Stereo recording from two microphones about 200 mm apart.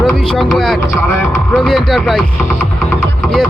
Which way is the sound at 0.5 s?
Centre (ahead or behind).